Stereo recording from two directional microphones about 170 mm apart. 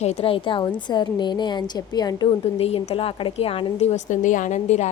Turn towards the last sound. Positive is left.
turn(degrees=45)  # may be behind; listen again after turning